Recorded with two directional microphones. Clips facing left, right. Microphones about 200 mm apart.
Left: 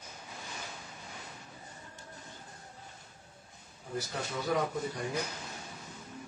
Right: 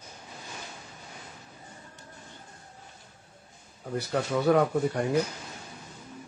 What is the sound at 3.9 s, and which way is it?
Speech, 65° right (ahead or behind).